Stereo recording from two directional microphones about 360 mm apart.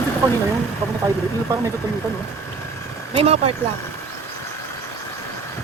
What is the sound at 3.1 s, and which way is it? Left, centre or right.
Speech, centre.